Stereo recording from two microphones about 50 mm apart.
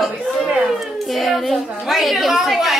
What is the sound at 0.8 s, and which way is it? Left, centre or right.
A child's voice, centre.